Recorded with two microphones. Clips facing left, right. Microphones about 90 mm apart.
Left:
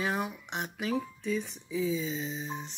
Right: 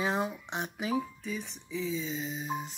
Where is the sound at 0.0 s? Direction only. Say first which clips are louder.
Right 1 dB; 25° right (ahead or behind).